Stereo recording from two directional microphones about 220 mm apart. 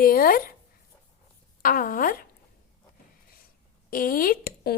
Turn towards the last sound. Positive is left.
turn(degrees=45)  # may be behind; listen again after turning